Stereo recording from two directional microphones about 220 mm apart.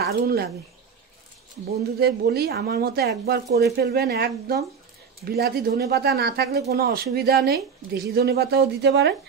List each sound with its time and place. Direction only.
0.0 s speech: 45° right (ahead or behind)
2.0 s speech: 45° right (ahead or behind)